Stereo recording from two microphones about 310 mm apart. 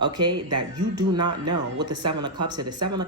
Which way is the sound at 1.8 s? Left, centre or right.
Centre.